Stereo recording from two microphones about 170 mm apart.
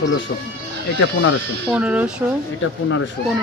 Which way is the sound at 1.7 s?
10° right (ahead or behind).